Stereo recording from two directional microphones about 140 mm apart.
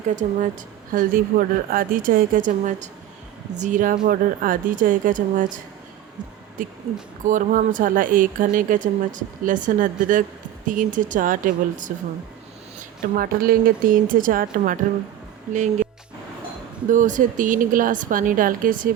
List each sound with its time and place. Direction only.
0.2 s speech: 55° right (ahead or behind)
0.9 s speech: 90° right; by 5.5 s 70° right (ahead or behind)
6.6 s speech: 75° right (ahead or behind)
13.0 s speech: 90° right
15.5 s speech: 60° right (ahead or behind)
16.9 s speech: 65° right (ahead or behind)